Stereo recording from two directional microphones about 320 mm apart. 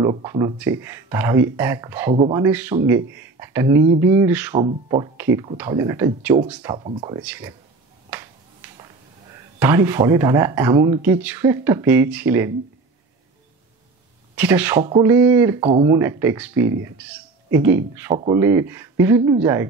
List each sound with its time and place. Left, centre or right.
0.0 s speech: centre
2.1 s speech: centre
2.4 s speech: centre
6.8 s speech: centre
8.7 s speech: centre
14.3 s speech: centre